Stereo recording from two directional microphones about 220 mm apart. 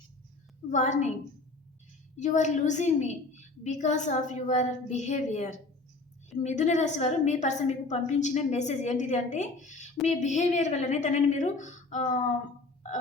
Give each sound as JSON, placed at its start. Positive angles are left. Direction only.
{"t": 0.7, "sound": "a woman's voice", "side_deg": 35}
{"t": 2.1, "sound": "a woman's voice", "side_deg": 35}